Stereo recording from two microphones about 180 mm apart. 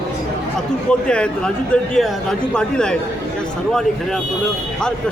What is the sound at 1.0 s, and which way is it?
Speech, 5° left (ahead or behind).